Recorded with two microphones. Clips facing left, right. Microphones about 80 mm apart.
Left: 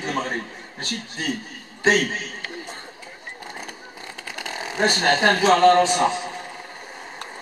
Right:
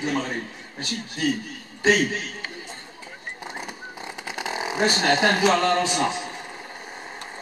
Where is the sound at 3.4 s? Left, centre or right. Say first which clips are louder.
Right 2 dB; centre.